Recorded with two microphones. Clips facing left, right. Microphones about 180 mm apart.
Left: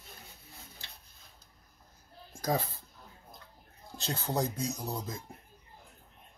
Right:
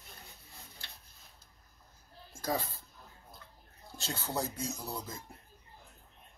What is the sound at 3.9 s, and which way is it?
Speech, 20° left (ahead or behind).